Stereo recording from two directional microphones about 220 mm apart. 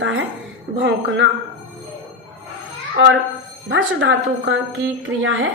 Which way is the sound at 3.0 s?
55° right (ahead or behind).